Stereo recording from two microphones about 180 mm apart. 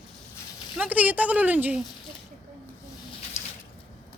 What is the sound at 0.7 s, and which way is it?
Speech, 5° right (ahead or behind).